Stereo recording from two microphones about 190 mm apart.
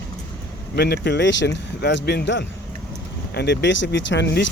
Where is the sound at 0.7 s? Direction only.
55° left (ahead or behind).